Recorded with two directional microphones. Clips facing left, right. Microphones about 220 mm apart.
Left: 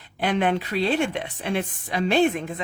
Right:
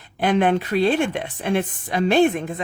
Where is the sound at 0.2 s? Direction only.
45° right (ahead or behind).